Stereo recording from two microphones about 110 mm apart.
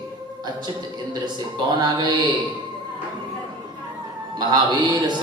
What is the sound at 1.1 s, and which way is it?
Speech, 40° right (ahead or behind).